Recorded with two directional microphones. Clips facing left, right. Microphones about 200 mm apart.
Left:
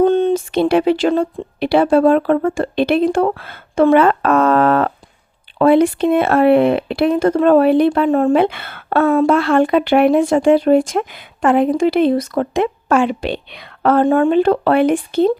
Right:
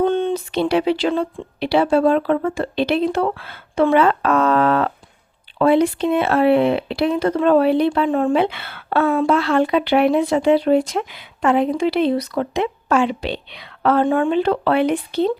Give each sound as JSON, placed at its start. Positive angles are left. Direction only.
{"t": 0.0, "sound": "speech", "side_deg": 40}